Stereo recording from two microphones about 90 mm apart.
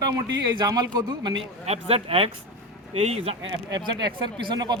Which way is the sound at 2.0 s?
90° right.